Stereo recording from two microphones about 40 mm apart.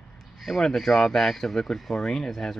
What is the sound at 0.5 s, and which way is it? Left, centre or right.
Speech, centre.